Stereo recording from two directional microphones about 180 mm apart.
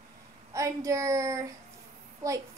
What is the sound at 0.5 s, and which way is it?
A woman's voice, 15° right (ahead or behind).